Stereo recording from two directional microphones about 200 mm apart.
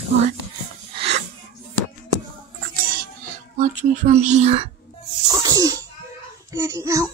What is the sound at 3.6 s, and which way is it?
Speech, 35° right (ahead or behind).